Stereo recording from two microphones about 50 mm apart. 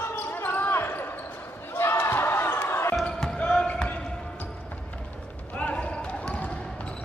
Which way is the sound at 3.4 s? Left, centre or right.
Centre.